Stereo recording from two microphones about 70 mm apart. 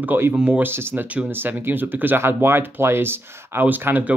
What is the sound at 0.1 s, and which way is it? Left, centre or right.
Speech, right.